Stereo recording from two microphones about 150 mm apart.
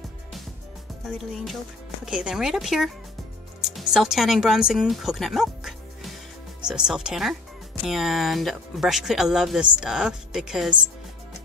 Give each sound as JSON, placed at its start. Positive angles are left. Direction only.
{"t": 1.0, "sound": "speech", "side_deg": 0}